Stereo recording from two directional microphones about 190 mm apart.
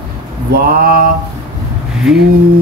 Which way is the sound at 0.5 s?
50° right (ahead or behind).